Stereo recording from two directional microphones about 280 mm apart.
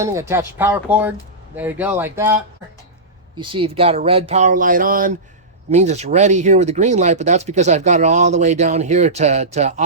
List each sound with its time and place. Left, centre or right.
0.0 s speech: centre